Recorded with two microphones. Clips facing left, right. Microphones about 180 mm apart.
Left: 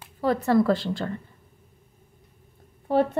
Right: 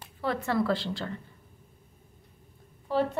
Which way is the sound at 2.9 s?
60° left (ahead or behind).